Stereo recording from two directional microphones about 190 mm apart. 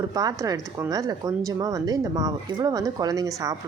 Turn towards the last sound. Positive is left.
turn(degrees=-20)  # may be behind; listen again after turning